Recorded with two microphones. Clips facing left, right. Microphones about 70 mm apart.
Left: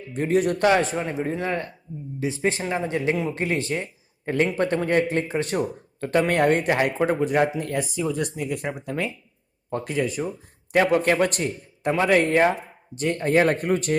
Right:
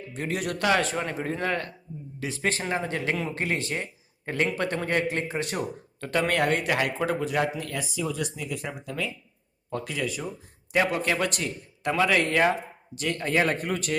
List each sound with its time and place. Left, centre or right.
0.1 s speech: left
4.4 s speech: left
9.6 s speech: left